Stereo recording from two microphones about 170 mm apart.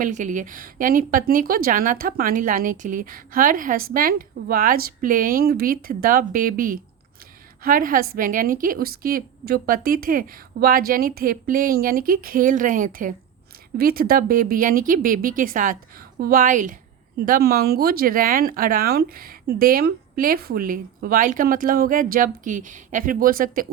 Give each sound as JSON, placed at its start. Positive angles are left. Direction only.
{"t": 0.0, "sound": "speech", "side_deg": -45}